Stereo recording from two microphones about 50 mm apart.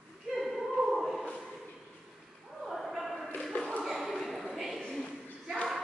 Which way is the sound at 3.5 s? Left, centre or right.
Centre.